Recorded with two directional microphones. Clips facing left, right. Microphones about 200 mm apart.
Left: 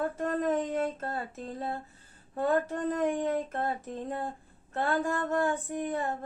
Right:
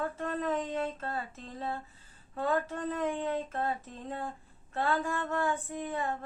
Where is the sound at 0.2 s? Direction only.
45° left (ahead or behind).